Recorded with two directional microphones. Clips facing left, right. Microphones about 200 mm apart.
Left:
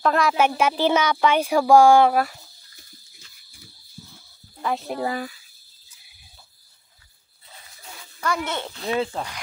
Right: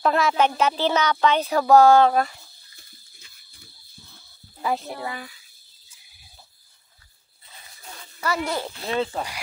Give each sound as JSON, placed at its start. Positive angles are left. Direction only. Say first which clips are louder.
{"t": 0.0, "sound": "speech", "louder": "even", "side_deg": 0}
{"t": 4.6, "sound": "a sound", "louder": "right 1 dB", "side_deg": -5}
{"t": 5.0, "sound": "speech", "louder": "left 7 dB", "side_deg": 40}
{"t": 8.2, "sound": "speech", "louder": "right 1 dB", "side_deg": -10}